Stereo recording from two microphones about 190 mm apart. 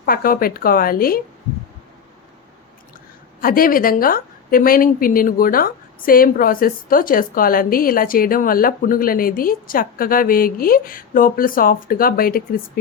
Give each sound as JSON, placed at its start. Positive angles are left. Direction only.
{"t": 0.0, "sound": "a woman's voice", "side_deg": 50}
{"t": 3.4, "sound": "a woman's voice", "side_deg": 50}